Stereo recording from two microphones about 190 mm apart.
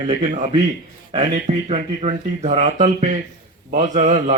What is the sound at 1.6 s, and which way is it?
A man's voice, 35° right (ahead or behind).